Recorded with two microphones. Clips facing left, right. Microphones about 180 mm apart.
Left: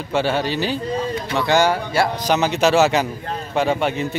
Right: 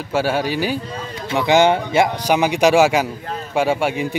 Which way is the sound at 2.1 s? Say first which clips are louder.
Right 2 dB; 10° right (ahead or behind).